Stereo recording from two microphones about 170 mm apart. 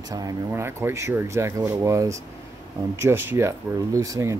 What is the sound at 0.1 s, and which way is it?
Speech, 20° right (ahead or behind).